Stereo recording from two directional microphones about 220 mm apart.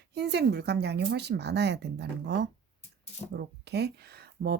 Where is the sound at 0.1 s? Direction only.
50° right (ahead or behind).